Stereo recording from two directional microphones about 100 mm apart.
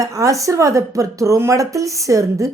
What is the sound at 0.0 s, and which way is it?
A woman's voice, 35° right (ahead or behind).